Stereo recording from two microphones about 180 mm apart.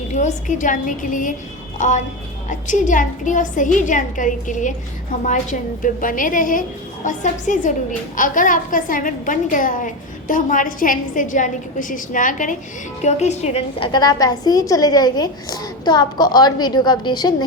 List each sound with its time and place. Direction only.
0.1 s a woman's voice: 40° left (ahead or behind); by 17.3 s 25° left (ahead or behind)